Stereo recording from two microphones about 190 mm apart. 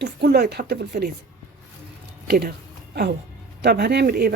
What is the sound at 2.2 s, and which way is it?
Speech, 55° right (ahead or behind).